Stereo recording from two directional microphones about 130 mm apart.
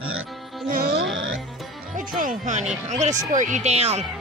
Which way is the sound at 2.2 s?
80° right.